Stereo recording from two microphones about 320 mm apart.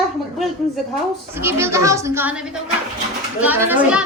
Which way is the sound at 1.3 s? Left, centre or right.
Centre.